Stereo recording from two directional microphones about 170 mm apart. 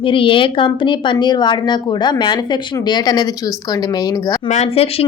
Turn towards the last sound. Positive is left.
turn(degrees=35)  # may be behind; listen again after turning